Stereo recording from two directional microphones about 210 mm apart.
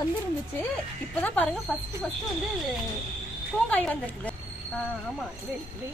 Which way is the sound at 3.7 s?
5° left (ahead or behind).